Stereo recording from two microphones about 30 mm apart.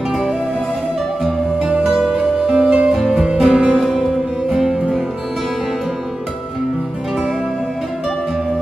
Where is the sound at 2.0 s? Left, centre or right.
Centre.